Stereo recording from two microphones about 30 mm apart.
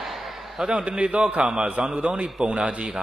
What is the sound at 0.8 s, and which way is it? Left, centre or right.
A man's voice, right.